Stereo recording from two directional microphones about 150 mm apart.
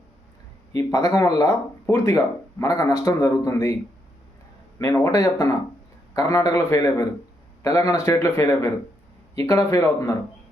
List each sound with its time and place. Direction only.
0.7 s speech: 25° left (ahead or behind)
4.8 s speech: 20° left (ahead or behind)